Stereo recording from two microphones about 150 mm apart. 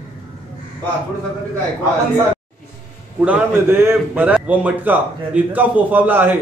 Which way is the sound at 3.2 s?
10° right (ahead or behind).